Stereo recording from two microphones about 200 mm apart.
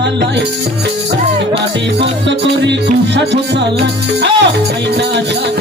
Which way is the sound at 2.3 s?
60° right (ahead or behind).